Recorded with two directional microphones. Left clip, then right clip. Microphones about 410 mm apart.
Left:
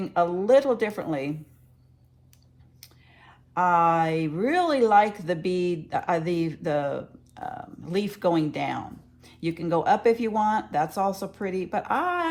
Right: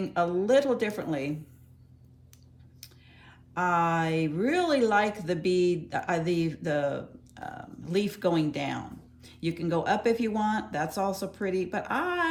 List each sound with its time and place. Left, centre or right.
0.0 s speech: centre
2.8 s speech: centre